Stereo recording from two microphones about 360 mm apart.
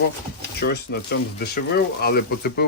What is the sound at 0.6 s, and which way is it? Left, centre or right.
Speech, left.